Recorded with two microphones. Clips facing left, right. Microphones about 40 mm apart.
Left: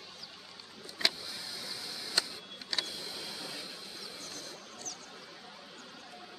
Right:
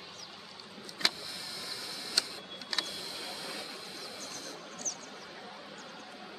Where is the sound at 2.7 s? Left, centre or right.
Right.